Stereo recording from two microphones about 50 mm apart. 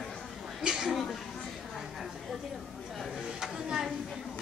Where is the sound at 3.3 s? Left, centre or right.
Centre.